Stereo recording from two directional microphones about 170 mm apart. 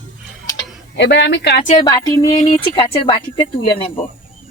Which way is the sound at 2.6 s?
30° left (ahead or behind).